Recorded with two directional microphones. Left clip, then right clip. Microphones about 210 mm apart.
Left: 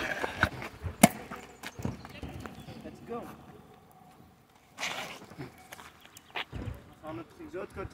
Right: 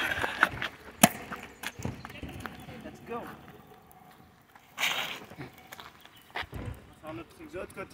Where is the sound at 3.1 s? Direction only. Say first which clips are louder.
Right 2 dB; centre (ahead or behind).